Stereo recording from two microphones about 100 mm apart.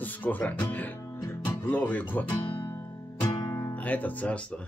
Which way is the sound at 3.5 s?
20° left (ahead or behind).